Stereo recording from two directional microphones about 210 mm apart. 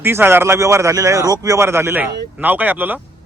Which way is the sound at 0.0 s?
10° right (ahead or behind).